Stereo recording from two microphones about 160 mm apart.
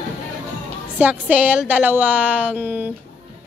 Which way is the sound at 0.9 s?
10° right (ahead or behind).